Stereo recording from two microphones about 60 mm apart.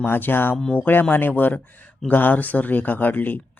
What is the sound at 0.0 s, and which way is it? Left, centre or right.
Speech, left.